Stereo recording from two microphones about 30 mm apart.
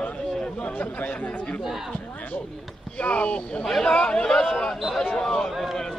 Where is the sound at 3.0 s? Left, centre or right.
Left.